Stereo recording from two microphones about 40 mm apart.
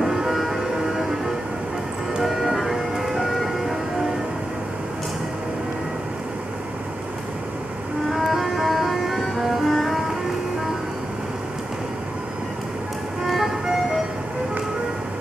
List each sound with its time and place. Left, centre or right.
0.0 s music: centre
2.2 s music: centre
8.1 s music: centre
13.2 s vehicle: centre